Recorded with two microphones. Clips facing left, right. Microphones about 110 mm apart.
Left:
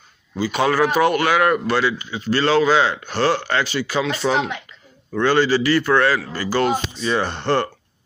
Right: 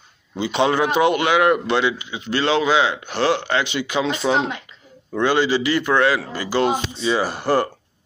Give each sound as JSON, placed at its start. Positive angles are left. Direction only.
{"t": 0.4, "sound": "a man's voice", "side_deg": -20}
{"t": 4.2, "sound": "speech", "side_deg": -5}
{"t": 5.1, "sound": "a man's voice", "side_deg": -15}